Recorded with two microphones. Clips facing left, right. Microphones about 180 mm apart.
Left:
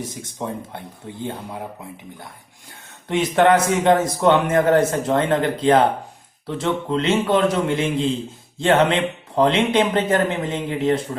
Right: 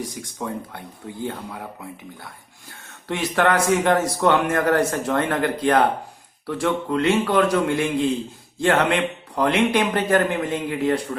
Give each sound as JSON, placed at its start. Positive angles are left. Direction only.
{"t": 0.0, "sound": "a man's voice", "side_deg": 25}
{"t": 3.1, "sound": "a man's voice", "side_deg": 20}